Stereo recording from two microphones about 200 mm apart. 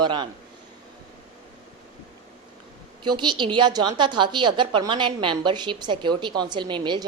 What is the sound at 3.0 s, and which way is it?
A woman's voice, 25° right (ahead or behind).